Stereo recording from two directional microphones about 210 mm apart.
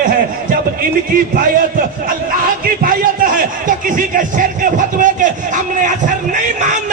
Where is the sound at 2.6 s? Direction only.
40° right (ahead or behind).